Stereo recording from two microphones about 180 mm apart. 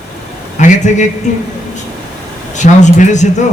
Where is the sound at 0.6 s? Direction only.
40° left (ahead or behind).